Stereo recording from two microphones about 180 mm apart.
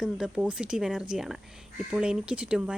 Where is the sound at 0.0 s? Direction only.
5° right (ahead or behind).